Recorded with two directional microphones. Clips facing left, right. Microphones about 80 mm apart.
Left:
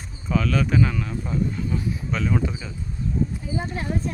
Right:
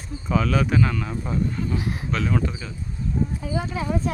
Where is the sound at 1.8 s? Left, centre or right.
Right.